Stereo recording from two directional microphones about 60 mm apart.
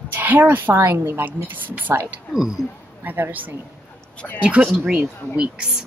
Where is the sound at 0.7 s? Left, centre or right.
Right.